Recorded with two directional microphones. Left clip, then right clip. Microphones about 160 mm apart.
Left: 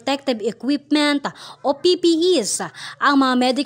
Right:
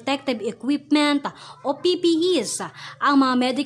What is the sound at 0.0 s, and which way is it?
A woman's voice, 35° left (ahead or behind).